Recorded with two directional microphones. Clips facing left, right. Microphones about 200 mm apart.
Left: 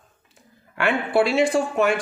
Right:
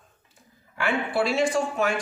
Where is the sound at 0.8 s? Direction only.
65° left (ahead or behind).